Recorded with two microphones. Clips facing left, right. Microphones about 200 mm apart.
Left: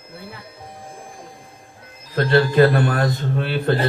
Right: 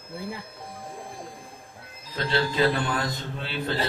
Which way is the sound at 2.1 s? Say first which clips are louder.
Left 10 dB; 55° left (ahead or behind).